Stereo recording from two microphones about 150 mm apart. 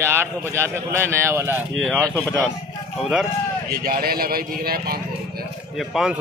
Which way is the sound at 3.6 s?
85° right.